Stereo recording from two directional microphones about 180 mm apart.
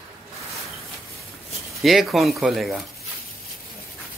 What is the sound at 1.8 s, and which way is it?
A man's voice, centre (ahead or behind).